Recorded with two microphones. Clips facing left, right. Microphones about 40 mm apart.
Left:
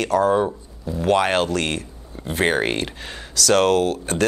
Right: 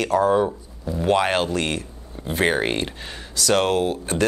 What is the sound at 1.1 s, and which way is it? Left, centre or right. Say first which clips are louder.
Speech: left 2 dB; left.